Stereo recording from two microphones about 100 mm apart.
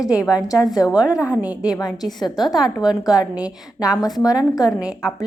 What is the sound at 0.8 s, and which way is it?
Speech, 35° left (ahead or behind).